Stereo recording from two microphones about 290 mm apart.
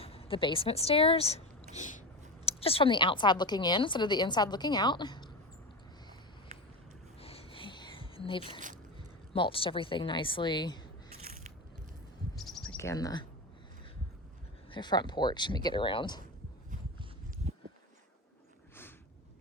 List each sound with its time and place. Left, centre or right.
0.0 s a woman's voice: centre
2.4 s speech: centre
7.2 s a sound: centre
9.3 s speech: centre
12.4 s bird vocalization: centre
14.7 s speech: centre
17.0 s a sound: right